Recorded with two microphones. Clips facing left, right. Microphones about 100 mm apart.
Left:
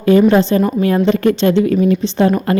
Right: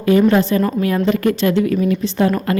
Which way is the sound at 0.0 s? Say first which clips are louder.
Left 3 dB; 30° left (ahead or behind).